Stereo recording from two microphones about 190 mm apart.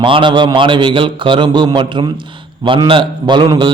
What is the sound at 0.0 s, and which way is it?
A man's voice, 25° right (ahead or behind).